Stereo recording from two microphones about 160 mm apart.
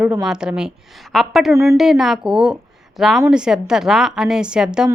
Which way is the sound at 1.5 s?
15° right (ahead or behind).